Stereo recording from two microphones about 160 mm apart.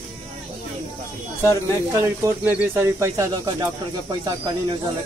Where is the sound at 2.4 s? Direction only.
15° right (ahead or behind).